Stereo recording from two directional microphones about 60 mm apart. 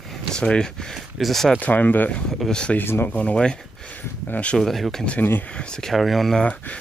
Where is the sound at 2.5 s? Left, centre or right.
Centre.